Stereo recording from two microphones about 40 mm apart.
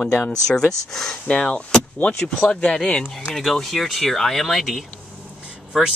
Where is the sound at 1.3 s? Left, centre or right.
Left.